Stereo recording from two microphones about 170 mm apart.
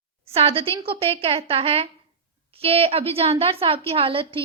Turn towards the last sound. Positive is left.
turn(degrees=-30)  # may be behind; listen again after turning